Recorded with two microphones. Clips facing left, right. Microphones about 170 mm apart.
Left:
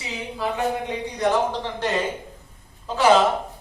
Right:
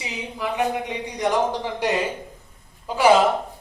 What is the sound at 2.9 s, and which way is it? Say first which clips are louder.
Speech: even; 10° right (ahead or behind).